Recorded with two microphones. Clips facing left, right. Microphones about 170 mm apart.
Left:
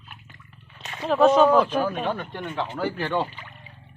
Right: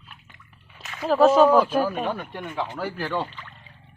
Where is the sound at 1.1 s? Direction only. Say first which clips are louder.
Right 1 dB; centre (ahead or behind).